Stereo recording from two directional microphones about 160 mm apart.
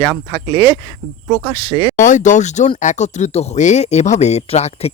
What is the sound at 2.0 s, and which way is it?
Speech, 55° left (ahead or behind).